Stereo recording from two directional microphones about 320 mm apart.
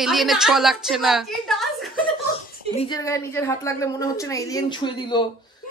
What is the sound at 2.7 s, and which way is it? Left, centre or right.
A woman's voice, centre.